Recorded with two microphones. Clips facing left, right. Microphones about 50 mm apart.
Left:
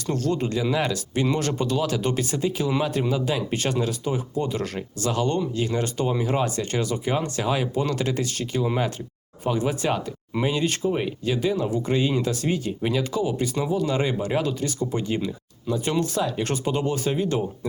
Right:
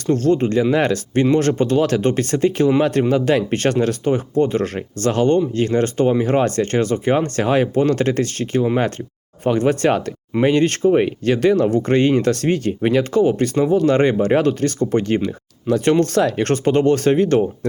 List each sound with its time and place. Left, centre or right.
0.1 s speech: right
11.3 s speech: right
11.6 s speech: right